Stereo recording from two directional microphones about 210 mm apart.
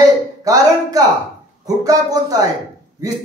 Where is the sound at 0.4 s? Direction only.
15° right (ahead or behind).